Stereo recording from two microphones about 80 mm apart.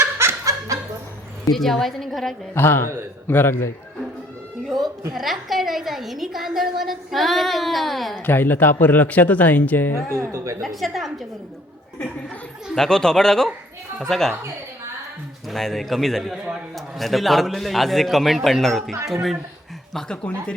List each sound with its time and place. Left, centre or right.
0.0 s snicker: right
1.5 s a woman's voice: centre
2.6 s speech: left
5.1 s a woman's voice: centre
8.3 s speech: left
10.3 s a woman's voice: right
10.6 s a woman's voice: centre
12.7 s a woman's voice: centre
15.4 s a woman's voice: centre